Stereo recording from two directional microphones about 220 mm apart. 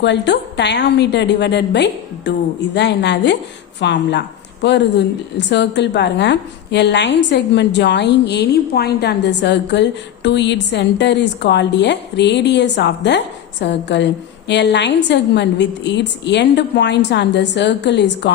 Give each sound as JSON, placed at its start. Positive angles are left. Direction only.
{"t": 0.0, "sound": "a woman's voice", "side_deg": 50}